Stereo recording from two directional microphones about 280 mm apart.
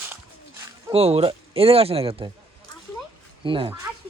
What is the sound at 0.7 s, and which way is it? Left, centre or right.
Speech, centre.